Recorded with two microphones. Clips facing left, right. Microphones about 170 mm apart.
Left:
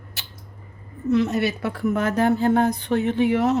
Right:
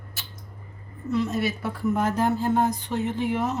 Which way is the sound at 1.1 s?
70° left (ahead or behind).